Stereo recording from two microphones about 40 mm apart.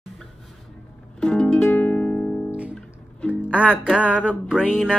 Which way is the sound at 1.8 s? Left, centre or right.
Left.